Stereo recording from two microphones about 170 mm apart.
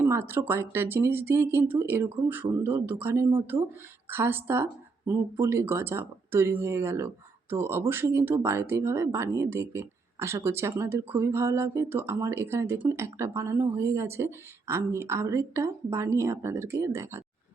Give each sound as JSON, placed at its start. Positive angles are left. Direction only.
{"t": 0.0, "sound": "speech", "side_deg": -15}